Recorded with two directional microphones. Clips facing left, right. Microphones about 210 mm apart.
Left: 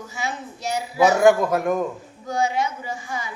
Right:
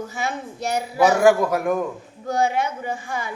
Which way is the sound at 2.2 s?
55° right (ahead or behind).